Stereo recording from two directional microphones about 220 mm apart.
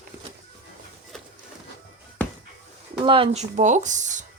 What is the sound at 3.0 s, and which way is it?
Speech, 25° right (ahead or behind).